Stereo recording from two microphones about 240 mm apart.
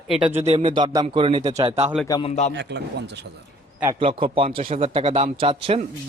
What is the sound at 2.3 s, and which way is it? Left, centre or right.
Speech, left.